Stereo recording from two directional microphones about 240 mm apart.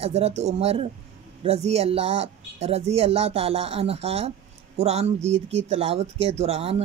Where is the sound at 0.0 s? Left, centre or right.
Right.